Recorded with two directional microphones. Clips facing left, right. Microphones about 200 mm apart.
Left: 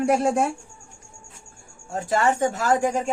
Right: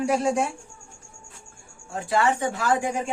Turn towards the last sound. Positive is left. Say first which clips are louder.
# left 3 dB
turn(degrees=40)  # may be behind; listen again after turning